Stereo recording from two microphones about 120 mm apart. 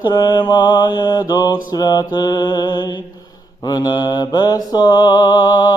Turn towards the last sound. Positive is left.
turn(degrees=35)  # may be behind; listen again after turning